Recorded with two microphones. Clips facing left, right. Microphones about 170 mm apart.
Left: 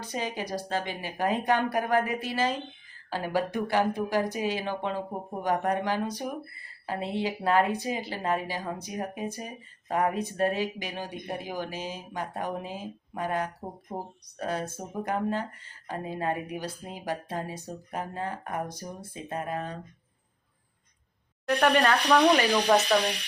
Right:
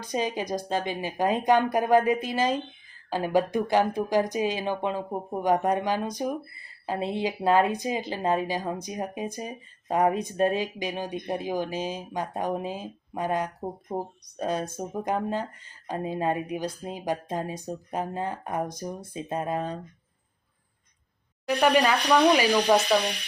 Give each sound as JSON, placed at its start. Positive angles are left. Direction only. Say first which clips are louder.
{"t": 0.0, "sound": "speech", "louder": "right 4 dB", "side_deg": -15}
{"t": 21.4, "sound": "speech", "louder": "right 1 dB", "side_deg": -5}